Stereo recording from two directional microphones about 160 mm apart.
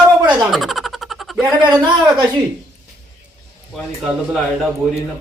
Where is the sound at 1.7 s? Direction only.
10° right (ahead or behind).